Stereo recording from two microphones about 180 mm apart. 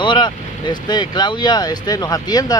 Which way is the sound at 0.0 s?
25° left (ahead or behind).